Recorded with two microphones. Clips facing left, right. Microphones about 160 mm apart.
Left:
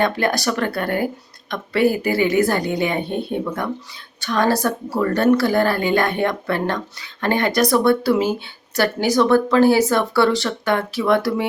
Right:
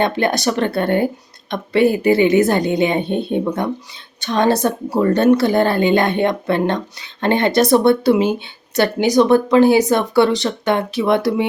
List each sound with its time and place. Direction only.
0.0 s a woman's voice: 25° right (ahead or behind)